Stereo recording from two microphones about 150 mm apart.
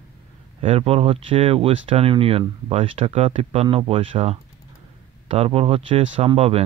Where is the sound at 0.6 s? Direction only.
40° right (ahead or behind).